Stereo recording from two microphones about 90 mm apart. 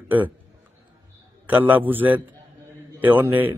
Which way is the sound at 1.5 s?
20° right (ahead or behind).